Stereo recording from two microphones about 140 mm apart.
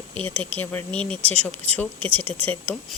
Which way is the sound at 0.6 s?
15° left (ahead or behind).